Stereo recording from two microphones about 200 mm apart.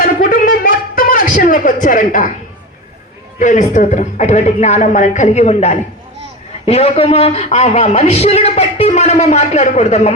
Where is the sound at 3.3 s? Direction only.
40° left (ahead or behind).